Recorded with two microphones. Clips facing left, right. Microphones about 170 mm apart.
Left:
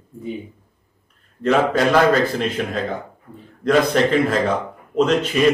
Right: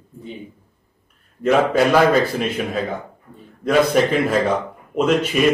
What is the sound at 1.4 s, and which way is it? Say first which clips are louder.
A man's voice: right 1 dB; 10° right (ahead or behind).